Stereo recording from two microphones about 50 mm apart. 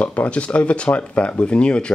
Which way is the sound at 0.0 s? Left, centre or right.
Left.